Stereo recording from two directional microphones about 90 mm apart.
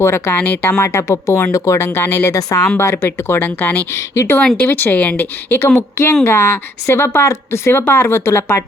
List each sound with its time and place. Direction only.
0.0 s speech: 25° left (ahead or behind)
2.9 s speech: 25° left (ahead or behind)
3.9 s speech: 30° left (ahead or behind)
4.4 s speech: 10° left (ahead or behind); by 8.6 s 30° left (ahead or behind)